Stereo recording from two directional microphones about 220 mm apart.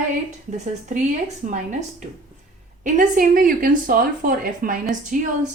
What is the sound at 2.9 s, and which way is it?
A woman's voice, 40° right (ahead or behind).